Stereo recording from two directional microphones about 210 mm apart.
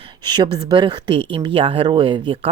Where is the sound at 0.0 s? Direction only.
20° right (ahead or behind).